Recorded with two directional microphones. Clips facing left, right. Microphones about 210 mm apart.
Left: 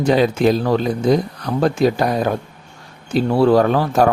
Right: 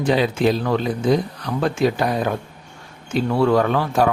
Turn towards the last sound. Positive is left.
turn(degrees=40)  # may be behind; listen again after turning